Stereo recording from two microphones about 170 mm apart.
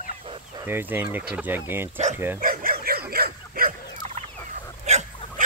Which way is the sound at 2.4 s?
55° right (ahead or behind).